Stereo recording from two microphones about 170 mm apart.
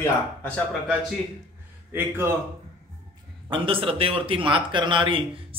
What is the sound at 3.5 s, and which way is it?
A man's voice, 30° right (ahead or behind).